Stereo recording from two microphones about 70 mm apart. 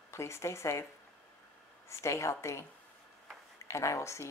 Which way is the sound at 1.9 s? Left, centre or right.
Left.